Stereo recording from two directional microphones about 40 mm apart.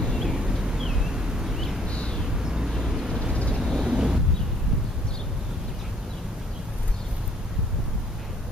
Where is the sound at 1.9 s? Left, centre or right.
Centre.